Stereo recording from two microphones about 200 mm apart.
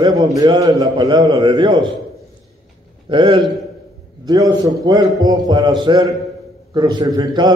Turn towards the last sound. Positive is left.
turn(degrees=-20)  # may be behind; listen again after turning